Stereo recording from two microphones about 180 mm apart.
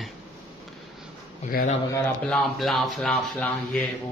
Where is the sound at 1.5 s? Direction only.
55° left (ahead or behind).